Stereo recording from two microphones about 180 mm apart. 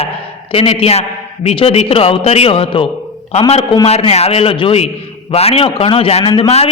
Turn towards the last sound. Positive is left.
turn(degrees=35)  # may be behind; listen again after turning